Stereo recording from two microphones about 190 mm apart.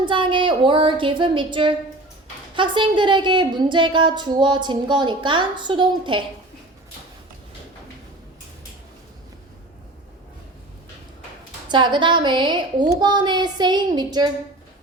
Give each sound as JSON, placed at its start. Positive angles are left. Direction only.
{"t": 0.0, "sound": "a woman's voice", "side_deg": -25}
{"t": 11.7, "sound": "a woman's voice", "side_deg": -25}